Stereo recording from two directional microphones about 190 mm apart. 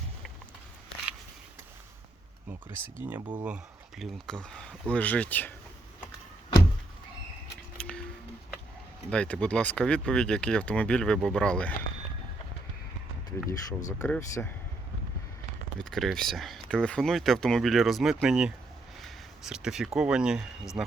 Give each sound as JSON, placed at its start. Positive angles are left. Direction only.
{"t": 3.0, "sound": "speech", "side_deg": -10}
{"t": 7.8, "sound": "a sound", "side_deg": 5}
{"t": 9.0, "sound": "speech", "side_deg": 5}
{"t": 13.4, "sound": "speech", "side_deg": 15}
{"t": 15.8, "sound": "speech", "side_deg": 0}